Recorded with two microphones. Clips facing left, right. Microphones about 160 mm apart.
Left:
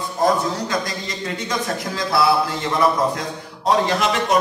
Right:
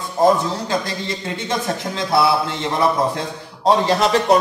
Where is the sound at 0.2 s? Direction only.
30° right (ahead or behind).